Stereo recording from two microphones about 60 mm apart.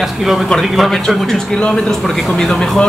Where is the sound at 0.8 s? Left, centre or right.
Centre.